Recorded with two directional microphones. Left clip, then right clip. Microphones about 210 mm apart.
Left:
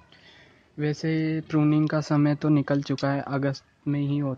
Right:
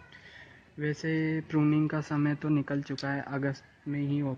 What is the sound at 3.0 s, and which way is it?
Speech, 45° left (ahead or behind).